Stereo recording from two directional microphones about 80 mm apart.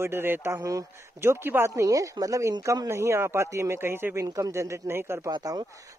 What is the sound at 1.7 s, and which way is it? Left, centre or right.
A man's voice, right.